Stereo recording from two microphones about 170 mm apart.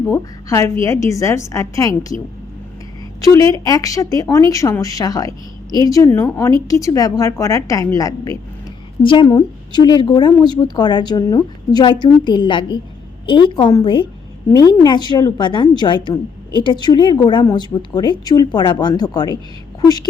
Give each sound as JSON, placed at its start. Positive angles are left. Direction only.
{"t": 0.1, "sound": "a woman's voice", "side_deg": 15}
{"t": 3.2, "sound": "a woman's voice", "side_deg": 20}